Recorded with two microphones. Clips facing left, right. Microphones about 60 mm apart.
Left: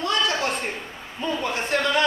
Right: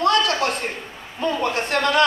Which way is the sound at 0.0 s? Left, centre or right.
Right.